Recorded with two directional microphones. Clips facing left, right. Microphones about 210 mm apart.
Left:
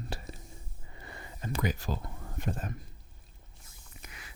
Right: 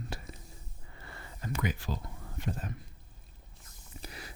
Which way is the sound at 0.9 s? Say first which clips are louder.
Left 2 dB; 20° left (ahead or behind).